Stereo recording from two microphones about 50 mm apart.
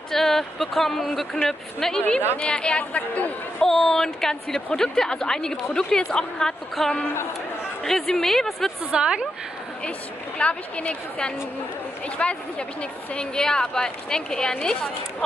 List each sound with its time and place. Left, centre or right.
0.1 s speech: centre
2.3 s a woman's voice: left
2.8 s a woman's voice: left
3.6 s a woman's voice: centre
8.9 s a woman's voice: centre
10.4 s a woman's voice: left